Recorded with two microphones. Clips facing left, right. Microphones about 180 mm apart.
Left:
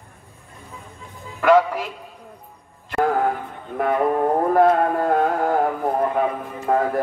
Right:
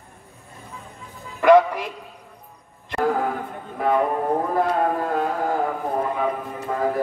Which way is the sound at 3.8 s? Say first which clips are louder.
Even; 55° left (ahead or behind).